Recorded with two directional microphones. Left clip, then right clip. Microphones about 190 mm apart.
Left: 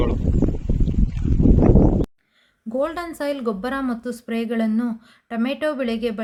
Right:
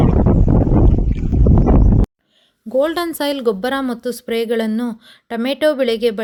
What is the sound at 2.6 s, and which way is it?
Speech, 35° right (ahead or behind).